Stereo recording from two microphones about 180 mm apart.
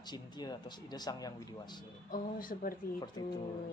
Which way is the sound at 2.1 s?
50° left (ahead or behind).